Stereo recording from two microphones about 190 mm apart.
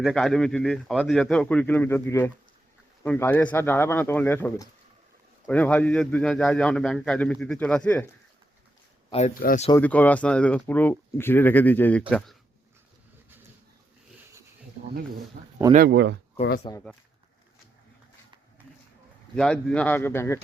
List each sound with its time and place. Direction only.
0.0 s a man's voice: centre (ahead or behind)
9.1 s speech: 30° left (ahead or behind)
9.7 s speech: 10° left (ahead or behind)
15.4 s speech: 45° right (ahead or behind)
15.9 s speech: 70° right (ahead or behind)
16.7 s speech: 25° left (ahead or behind)
19.4 s speech: 5° left (ahead or behind)